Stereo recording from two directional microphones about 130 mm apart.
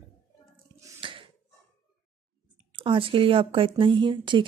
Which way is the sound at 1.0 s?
40° right (ahead or behind).